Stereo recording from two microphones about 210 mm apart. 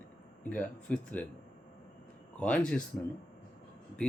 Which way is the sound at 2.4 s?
5° left (ahead or behind).